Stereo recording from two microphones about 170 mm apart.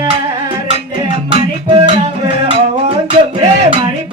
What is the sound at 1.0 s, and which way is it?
Music, 30° right (ahead or behind).